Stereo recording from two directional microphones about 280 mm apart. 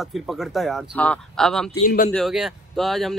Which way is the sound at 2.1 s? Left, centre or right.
Centre.